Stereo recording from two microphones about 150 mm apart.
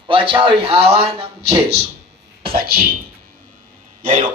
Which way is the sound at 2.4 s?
90° right.